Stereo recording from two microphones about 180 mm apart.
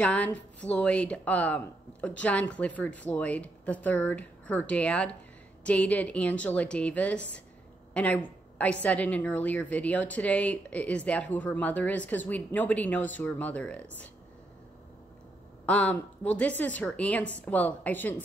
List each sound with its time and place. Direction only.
0.0 s a woman's voice: 10° left (ahead or behind)
7.9 s a sound: 10° left (ahead or behind)
8.8 s a woman's voice: 5° left (ahead or behind)
15.6 s a woman's voice: 10° left (ahead or behind)